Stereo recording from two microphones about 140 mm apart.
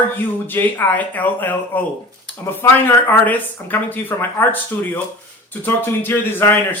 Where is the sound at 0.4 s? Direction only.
15° left (ahead or behind).